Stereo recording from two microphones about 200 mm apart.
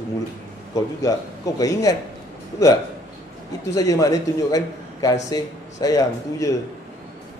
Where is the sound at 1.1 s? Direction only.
15° left (ahead or behind).